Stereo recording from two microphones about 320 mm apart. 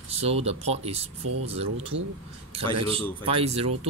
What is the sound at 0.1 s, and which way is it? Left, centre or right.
A man's voice, centre.